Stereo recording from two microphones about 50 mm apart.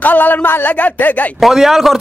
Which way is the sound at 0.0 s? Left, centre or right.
Left.